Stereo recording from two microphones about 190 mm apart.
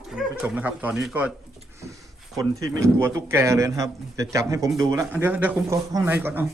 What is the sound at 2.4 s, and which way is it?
A man's voice, 15° right (ahead or behind).